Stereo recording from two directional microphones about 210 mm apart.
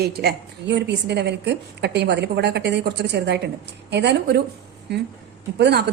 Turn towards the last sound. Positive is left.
turn(degrees=-50)  # may be behind; listen again after turning